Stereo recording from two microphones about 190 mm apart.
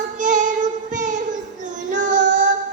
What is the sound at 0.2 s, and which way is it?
Child singing, 40° right (ahead or behind).